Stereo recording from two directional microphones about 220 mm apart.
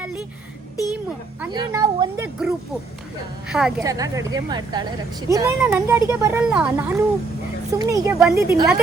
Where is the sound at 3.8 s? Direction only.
15° right (ahead or behind).